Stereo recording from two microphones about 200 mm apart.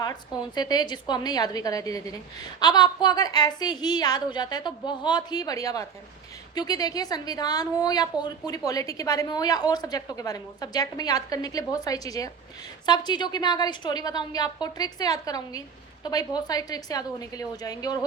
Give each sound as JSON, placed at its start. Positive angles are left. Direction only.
{"t": 0.0, "sound": "a woman's voice", "side_deg": 20}